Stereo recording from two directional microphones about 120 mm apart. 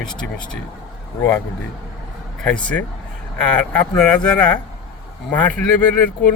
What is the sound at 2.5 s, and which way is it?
A man's voice, 10° left (ahead or behind).